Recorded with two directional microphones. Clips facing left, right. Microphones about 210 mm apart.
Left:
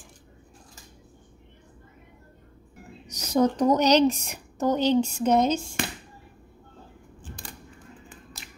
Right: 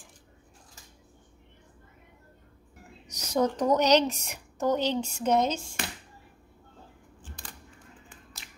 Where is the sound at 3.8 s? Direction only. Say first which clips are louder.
Left 3 dB; 35° left (ahead or behind).